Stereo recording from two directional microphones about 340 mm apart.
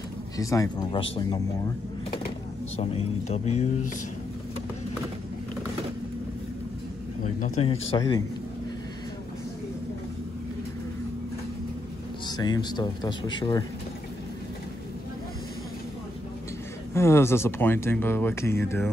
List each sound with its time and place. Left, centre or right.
0.4 s speech: centre
2.8 s speech: centre
7.2 s speech: left
12.3 s speech: centre
16.9 s speech: centre